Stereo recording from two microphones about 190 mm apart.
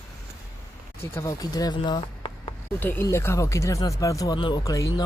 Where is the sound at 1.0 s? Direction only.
15° left (ahead or behind).